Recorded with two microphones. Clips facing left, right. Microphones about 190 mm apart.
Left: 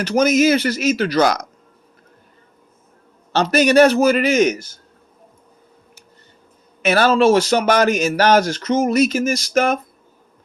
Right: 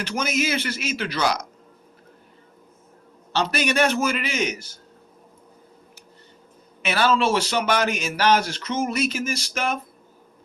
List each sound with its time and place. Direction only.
0.0 s speech: 40° left (ahead or behind)
3.3 s speech: 40° left (ahead or behind)
6.8 s speech: 45° left (ahead or behind)